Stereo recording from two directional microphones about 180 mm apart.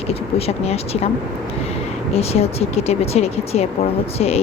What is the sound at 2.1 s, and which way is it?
Speech, 35° left (ahead or behind).